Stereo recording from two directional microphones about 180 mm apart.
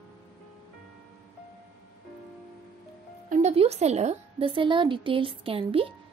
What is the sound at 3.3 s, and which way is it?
A woman's voice, 35° right (ahead or behind).